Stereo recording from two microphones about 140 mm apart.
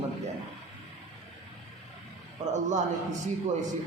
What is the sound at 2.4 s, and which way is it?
Speech, 60° right (ahead or behind).